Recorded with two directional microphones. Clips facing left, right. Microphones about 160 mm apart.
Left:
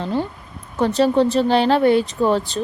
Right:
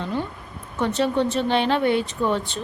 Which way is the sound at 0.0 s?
30° left (ahead or behind).